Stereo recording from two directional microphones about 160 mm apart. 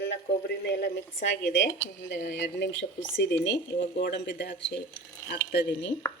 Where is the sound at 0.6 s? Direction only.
90° left.